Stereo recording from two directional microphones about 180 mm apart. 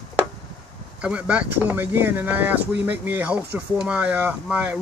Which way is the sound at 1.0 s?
5° right (ahead or behind).